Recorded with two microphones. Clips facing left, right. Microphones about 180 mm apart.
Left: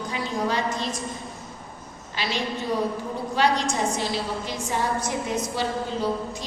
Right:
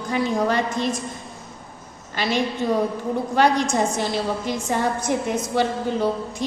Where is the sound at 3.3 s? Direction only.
50° right (ahead or behind).